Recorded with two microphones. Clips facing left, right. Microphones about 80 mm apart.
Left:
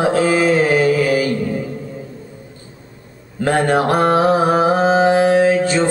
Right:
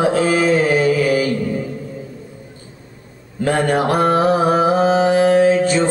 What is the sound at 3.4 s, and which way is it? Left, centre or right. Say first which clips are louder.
Mantra: left 1 dB; left.